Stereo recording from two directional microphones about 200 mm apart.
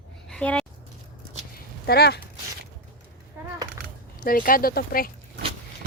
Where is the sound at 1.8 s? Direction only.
55° left (ahead or behind).